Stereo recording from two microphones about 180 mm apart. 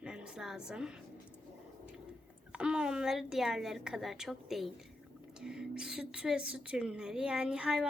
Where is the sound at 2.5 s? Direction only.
5° right (ahead or behind).